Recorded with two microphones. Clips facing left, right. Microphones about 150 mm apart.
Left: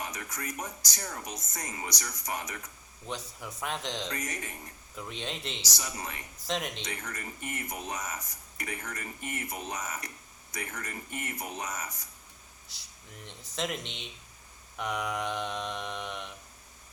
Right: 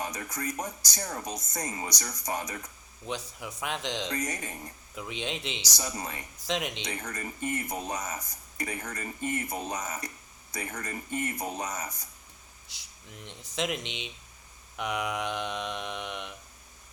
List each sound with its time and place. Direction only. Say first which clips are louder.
0.0 s speech: right 4 dB; 35° right (ahead or behind)
3.1 s mantra: right 3 dB; centre (ahead or behind)
5.7 s speech: right 3 dB; 35° right (ahead or behind)
6.4 s mantra: right 2 dB; centre (ahead or behind)
6.8 s speech: right 3 dB; 35° right (ahead or behind)
12.6 s mantra: right 3 dB; centre (ahead or behind)